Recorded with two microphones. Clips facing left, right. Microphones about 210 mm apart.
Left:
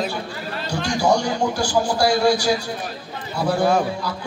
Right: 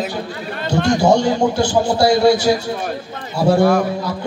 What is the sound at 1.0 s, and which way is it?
A man's voice, 25° right (ahead or behind).